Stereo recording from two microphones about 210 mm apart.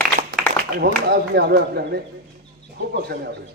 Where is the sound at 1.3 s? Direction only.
55° right (ahead or behind).